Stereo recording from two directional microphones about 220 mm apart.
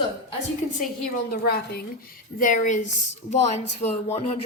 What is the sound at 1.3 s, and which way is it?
A woman's voice, 45° left (ahead or behind).